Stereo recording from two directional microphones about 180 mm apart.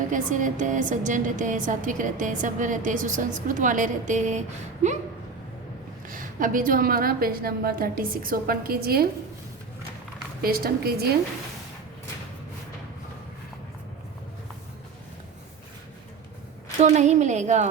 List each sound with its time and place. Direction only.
0.1 s a woman's voice: 45° right (ahead or behind)
6.1 s a woman's voice: 50° right (ahead or behind)
10.4 s a woman's voice: 55° right (ahead or behind)
16.8 s a woman's voice: 40° right (ahead or behind)